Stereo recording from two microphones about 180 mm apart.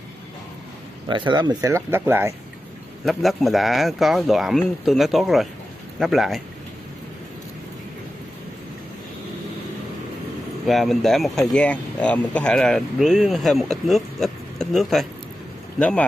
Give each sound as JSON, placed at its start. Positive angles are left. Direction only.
{"t": 1.0, "sound": "speech", "side_deg": -25}
{"t": 3.1, "sound": "speech", "side_deg": 0}
{"t": 10.7, "sound": "speech", "side_deg": 0}